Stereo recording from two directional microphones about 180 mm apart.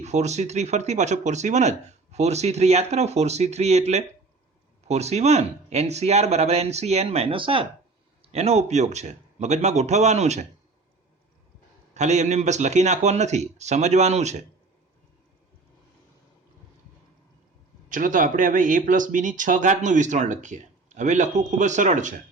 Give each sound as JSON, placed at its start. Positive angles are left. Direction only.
{"t": 0.0, "sound": "speech", "side_deg": -40}
{"t": 11.9, "sound": "speech", "side_deg": -40}
{"t": 17.8, "sound": "speech", "side_deg": -45}